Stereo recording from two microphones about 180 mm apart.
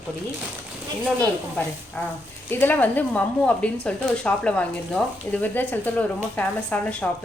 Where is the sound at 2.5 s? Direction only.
10° left (ahead or behind).